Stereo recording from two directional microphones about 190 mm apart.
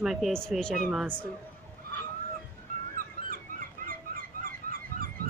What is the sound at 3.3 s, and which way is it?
Goose, 50° right (ahead or behind).